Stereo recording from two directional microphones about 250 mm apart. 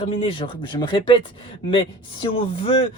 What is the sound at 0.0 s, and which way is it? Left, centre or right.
Speech, left.